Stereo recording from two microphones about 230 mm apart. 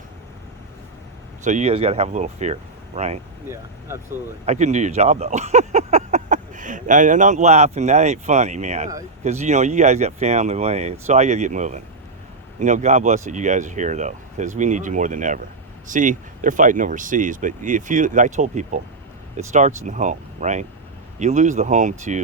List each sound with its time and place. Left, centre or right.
1.5 s speech: right
4.4 s speech: right